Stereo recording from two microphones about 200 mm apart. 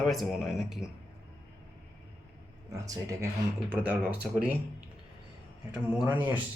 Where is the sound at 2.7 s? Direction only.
15° right (ahead or behind).